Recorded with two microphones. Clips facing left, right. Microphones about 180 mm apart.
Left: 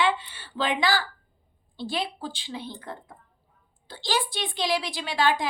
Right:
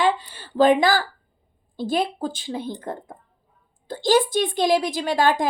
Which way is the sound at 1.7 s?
45° right (ahead or behind).